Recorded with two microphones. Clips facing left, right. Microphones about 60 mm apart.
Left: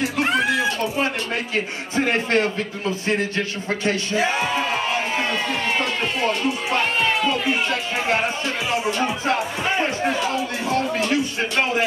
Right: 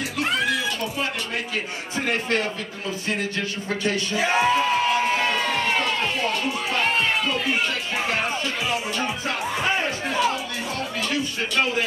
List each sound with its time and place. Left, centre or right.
0.2 s a sound: left
8.6 s speech: left
11.0 s speech: left